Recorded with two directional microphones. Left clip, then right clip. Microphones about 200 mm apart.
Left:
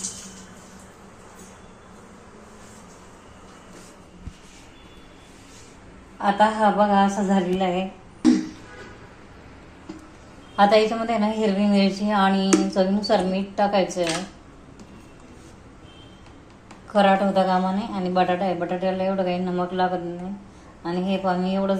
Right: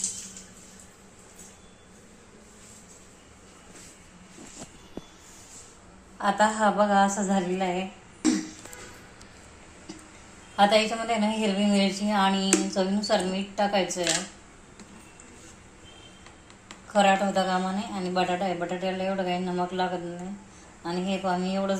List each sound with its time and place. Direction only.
6.4 s a woman's voice: 20° right (ahead or behind)
7.0 s speech: centre (ahead or behind)
10.5 s a woman's voice: centre (ahead or behind)
16.9 s a woman's voice: centre (ahead or behind)